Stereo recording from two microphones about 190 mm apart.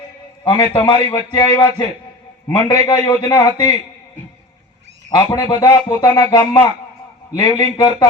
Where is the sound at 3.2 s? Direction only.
25° left (ahead or behind).